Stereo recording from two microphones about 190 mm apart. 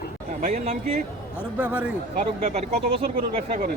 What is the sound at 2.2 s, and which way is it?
Speech, 35° right (ahead or behind).